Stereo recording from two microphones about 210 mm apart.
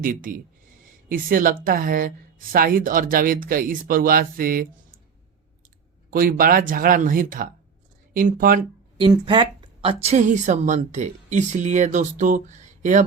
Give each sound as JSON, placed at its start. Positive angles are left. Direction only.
{"t": 0.0, "sound": "a woman's voice", "side_deg": -40}
{"t": 6.1, "sound": "a woman's voice", "side_deg": -45}
{"t": 9.0, "sound": "a woman's voice", "side_deg": -25}